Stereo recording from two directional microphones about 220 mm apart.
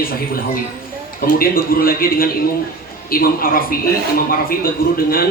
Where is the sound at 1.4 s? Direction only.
40° left (ahead or behind).